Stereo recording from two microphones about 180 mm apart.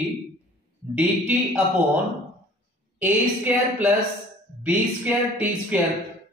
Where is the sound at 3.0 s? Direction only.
10° right (ahead or behind).